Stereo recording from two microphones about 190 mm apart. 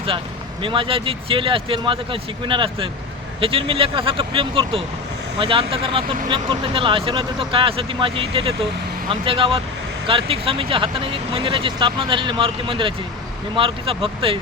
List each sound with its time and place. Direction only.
0.6 s speech: 25° right (ahead or behind)